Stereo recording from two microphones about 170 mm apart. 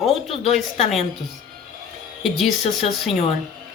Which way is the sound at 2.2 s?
Centre (ahead or behind).